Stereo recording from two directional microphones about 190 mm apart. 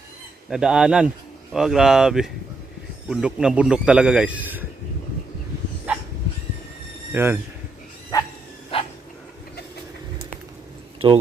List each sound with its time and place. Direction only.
0.5 s a man's voice: 5° right (ahead or behind)
7.1 s speech: 10° right (ahead or behind)
8.1 s bow-wow: 20° left (ahead or behind)
8.7 s dog: 30° left (ahead or behind)
11.0 s speech: 30° right (ahead or behind)